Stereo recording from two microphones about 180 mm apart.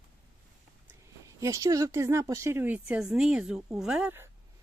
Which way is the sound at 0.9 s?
15° right (ahead or behind).